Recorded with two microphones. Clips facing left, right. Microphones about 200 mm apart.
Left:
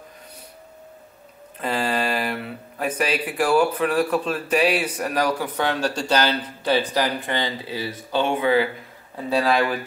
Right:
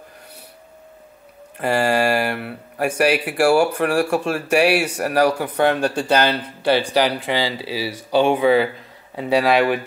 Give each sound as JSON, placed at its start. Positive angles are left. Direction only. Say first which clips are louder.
{"t": 1.6, "sound": "a sound", "louder": "right 6 dB", "side_deg": -75}
{"t": 3.0, "sound": "speech", "louder": "right 6 dB", "side_deg": -75}
{"t": 6.9, "sound": "speech", "louder": "right 4 dB", "side_deg": -80}
{"t": 8.1, "sound": "speech", "louder": "right 5 dB", "side_deg": -15}
{"t": 9.1, "sound": "speech", "louder": "right 4 dB", "side_deg": -75}